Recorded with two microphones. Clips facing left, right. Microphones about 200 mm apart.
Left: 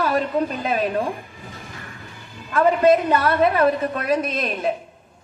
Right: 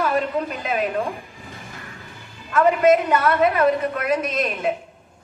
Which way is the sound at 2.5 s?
30° left (ahead or behind).